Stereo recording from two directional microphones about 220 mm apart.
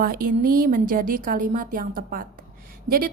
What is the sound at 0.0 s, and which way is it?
A woman's voice, 40° right (ahead or behind).